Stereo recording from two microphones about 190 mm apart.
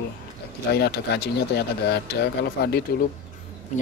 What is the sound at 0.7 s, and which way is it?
Speech, 60° left (ahead or behind).